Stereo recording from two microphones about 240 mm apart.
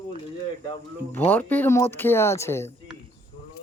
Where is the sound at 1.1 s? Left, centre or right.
Centre.